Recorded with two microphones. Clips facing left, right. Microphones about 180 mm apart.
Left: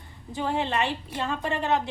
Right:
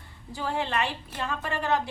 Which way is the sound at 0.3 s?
20° left (ahead or behind).